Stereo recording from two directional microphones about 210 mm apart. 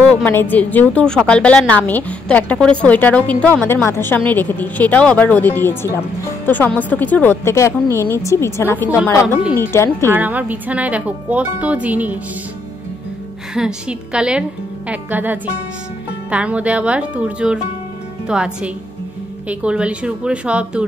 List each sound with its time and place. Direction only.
0.2 s speech: 10° left (ahead or behind)
10.1 s speech: 10° right (ahead or behind)
13.6 s a woman's voice: 5° right (ahead or behind)